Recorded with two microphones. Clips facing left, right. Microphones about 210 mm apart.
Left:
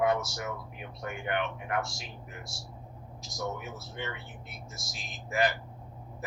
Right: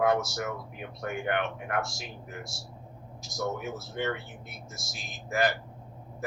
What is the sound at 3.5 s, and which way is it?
Speech, 45° right (ahead or behind).